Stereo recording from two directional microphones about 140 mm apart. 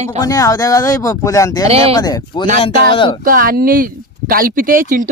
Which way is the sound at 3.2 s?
90° right.